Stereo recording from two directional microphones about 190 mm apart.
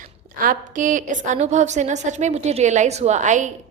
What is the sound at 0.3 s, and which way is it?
A woman's voice, 45° right (ahead or behind).